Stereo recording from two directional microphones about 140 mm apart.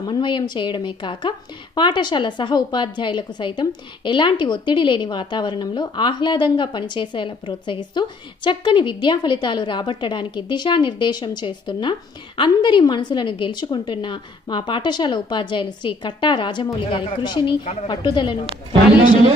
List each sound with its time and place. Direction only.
0.0 s a woman's voice: 30° left (ahead or behind)